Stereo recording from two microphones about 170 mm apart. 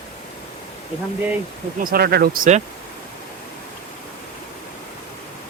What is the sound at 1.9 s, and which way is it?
Speech, 65° right (ahead or behind).